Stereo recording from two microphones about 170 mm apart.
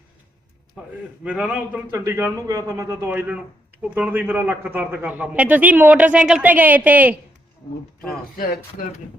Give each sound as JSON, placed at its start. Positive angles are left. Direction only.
{"t": 0.8, "sound": "a man's voice", "side_deg": -5}
{"t": 8.4, "sound": "speech", "side_deg": 55}